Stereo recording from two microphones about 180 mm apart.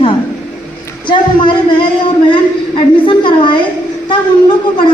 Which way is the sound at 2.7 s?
25° left (ahead or behind).